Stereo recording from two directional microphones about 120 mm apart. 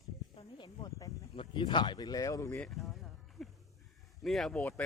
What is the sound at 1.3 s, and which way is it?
Speech, 45° left (ahead or behind).